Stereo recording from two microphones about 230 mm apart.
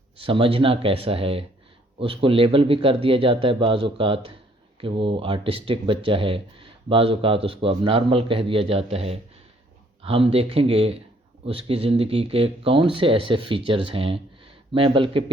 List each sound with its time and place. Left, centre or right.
0.2 s speech: right